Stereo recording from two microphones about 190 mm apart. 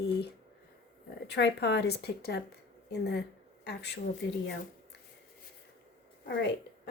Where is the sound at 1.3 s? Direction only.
60° left (ahead or behind).